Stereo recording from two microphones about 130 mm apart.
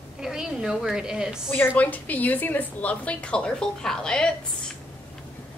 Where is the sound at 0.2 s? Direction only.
5° right (ahead or behind).